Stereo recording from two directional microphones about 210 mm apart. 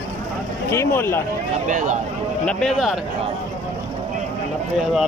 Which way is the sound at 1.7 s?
35° right (ahead or behind).